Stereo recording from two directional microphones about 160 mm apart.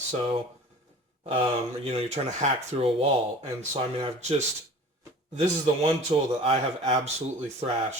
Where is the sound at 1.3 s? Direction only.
35° right (ahead or behind).